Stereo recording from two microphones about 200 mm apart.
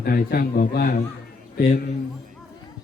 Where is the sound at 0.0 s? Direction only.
50° left (ahead or behind).